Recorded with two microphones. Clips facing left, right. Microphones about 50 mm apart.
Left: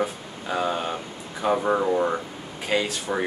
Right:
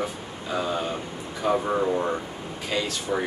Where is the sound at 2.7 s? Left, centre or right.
Left.